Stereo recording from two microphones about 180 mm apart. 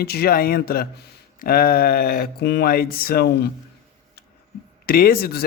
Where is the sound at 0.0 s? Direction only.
60° left (ahead or behind).